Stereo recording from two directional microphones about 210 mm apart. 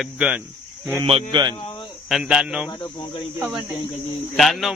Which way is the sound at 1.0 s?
25° right (ahead or behind).